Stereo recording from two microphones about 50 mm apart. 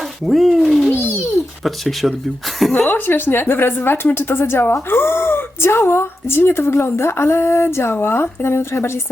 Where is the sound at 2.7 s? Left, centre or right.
Left.